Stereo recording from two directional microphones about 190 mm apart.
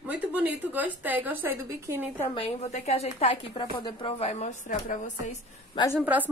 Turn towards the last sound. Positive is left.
turn(degrees=-10)  # may be behind; listen again after turning